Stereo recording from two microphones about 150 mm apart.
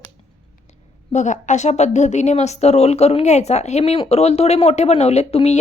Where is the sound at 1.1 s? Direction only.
55° left (ahead or behind).